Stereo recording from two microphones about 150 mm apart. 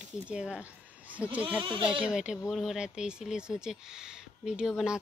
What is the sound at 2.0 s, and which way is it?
Speech, 5° right (ahead or behind).